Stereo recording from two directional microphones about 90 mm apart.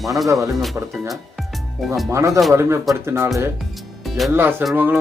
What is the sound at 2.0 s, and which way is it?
A man's voice, 35° right (ahead or behind).